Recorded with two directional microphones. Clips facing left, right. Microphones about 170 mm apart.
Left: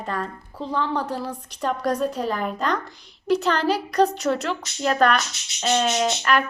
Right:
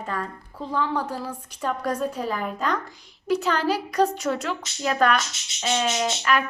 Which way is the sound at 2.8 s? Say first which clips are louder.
Left 3 dB; 70° left (ahead or behind).